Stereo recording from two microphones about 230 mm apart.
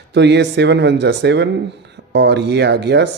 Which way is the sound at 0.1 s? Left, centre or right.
Right.